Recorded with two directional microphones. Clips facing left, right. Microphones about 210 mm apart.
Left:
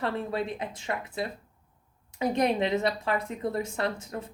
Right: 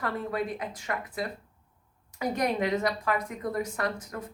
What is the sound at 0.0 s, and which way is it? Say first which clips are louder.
Speech: left 1 dB; 25° left (ahead or behind).